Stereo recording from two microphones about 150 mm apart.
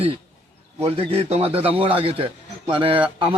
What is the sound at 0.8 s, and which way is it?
A man's voice, 40° right (ahead or behind).